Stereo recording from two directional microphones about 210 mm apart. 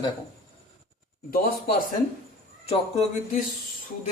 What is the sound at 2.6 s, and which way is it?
Speech, 30° left (ahead or behind).